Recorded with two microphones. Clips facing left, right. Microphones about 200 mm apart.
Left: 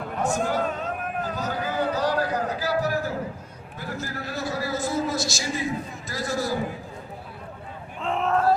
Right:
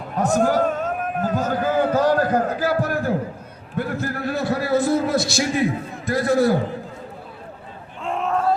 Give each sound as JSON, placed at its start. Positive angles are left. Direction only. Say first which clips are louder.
{"t": 0.2, "sound": "a sound", "louder": "right 7 dB", "side_deg": -40}
{"t": 3.8, "sound": "a man's voice", "louder": "right 8 dB", "side_deg": -60}
{"t": 8.0, "sound": "vehicle", "louder": "right 1 dB", "side_deg": 0}